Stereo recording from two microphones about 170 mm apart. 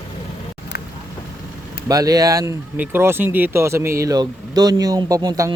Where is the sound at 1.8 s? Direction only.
20° right (ahead or behind).